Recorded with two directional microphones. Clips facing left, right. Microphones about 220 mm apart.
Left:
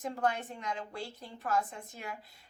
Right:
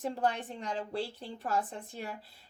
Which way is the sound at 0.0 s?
35° right (ahead or behind).